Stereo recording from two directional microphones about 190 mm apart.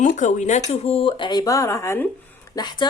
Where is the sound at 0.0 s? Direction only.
40° left (ahead or behind).